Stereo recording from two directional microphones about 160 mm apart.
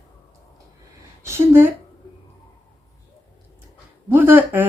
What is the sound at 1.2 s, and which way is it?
Speech, 15° right (ahead or behind).